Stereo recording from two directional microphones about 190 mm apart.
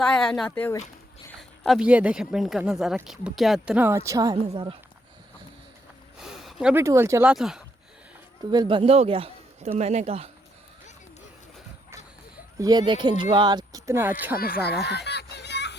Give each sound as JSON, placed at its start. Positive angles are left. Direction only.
{"t": 0.0, "sound": "speech", "side_deg": 5}
{"t": 6.1, "sound": "a sound", "side_deg": 0}
{"t": 6.8, "sound": "speech", "side_deg": -15}
{"t": 8.4, "sound": "speech", "side_deg": -25}
{"t": 12.5, "sound": "speech", "side_deg": -20}
{"t": 14.3, "sound": "children playing", "side_deg": 50}